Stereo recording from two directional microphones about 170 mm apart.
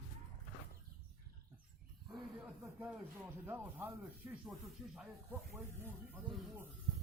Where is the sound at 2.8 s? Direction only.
15° right (ahead or behind).